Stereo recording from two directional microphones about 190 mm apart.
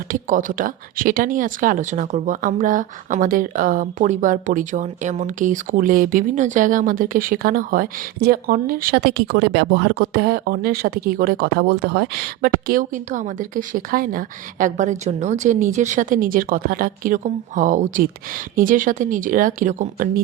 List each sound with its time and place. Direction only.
0.1 s speech: 45° right (ahead or behind)